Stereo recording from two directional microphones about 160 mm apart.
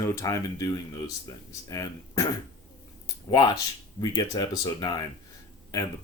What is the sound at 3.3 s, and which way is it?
Speech, 25° left (ahead or behind).